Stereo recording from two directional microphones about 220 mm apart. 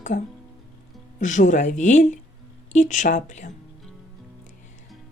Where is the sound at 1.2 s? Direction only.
35° left (ahead or behind).